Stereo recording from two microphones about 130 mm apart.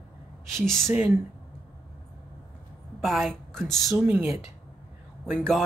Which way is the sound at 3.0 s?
Centre (ahead or behind).